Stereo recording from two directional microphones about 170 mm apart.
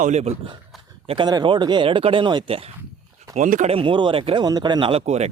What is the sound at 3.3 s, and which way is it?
Speech, 45° right (ahead or behind).